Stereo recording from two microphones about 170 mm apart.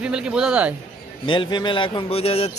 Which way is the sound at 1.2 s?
30° left (ahead or behind).